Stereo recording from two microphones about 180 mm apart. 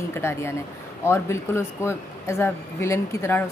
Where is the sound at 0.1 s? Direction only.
15° left (ahead or behind).